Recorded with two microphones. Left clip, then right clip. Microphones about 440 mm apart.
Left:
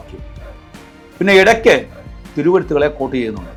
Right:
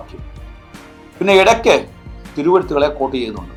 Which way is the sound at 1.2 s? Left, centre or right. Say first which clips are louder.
Left 1 dB; left.